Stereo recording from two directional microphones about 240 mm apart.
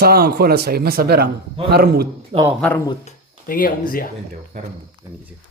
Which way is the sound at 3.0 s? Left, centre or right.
Left.